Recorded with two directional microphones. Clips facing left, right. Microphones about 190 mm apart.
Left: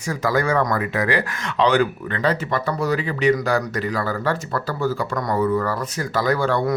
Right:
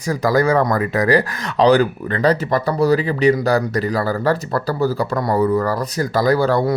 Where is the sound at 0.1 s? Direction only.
35° right (ahead or behind).